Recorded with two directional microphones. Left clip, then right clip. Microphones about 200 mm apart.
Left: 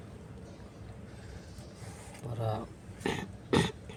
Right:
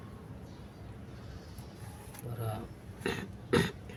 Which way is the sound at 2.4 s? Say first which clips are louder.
Left 6 dB; 30° left (ahead or behind).